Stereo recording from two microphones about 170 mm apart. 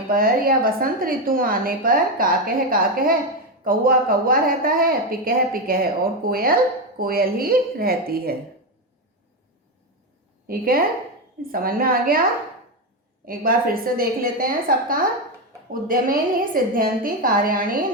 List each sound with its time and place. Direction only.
0.1 s a woman's voice: 60° right (ahead or behind)
10.4 s a woman's voice: 60° right (ahead or behind)
13.2 s a woman's voice: 60° right (ahead or behind)